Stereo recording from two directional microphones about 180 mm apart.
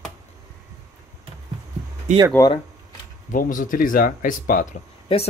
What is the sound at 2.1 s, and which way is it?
Speech, 40° right (ahead or behind).